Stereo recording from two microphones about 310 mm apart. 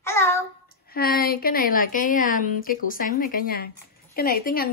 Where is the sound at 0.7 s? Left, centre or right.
Left.